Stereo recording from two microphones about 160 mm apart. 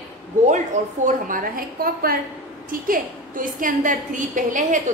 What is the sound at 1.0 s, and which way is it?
A woman's voice, 60° right (ahead or behind).